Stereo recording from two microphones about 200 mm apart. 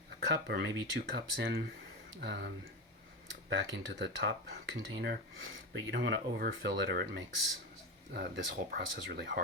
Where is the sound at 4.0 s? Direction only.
60° right (ahead or behind).